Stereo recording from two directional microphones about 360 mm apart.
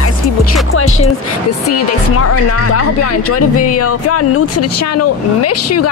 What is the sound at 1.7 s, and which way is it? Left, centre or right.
Speech, left.